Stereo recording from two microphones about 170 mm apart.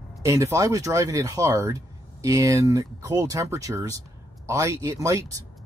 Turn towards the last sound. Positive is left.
turn(degrees=-20)  # may be behind; listen again after turning